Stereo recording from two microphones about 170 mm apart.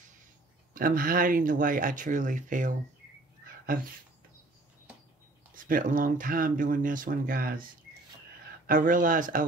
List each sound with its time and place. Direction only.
0.7 s speech: 55° right (ahead or behind)
5.5 s speech: 55° right (ahead or behind)
8.6 s speech: 50° right (ahead or behind)